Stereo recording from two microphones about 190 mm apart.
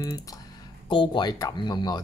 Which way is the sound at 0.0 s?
20° left (ahead or behind).